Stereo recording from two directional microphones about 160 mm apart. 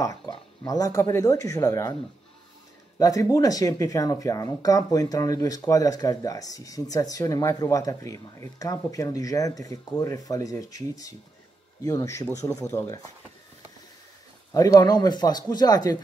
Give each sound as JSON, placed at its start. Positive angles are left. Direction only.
{"t": 0.3, "sound": "speech", "side_deg": 20}
{"t": 3.0, "sound": "speech", "side_deg": 20}
{"t": 14.5, "sound": "speech", "side_deg": 20}